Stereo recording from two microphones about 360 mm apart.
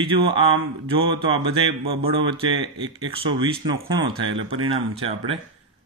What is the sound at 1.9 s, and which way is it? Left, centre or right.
A man's voice, centre.